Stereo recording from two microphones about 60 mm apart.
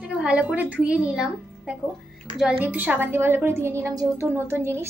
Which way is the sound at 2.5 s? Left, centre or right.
Right.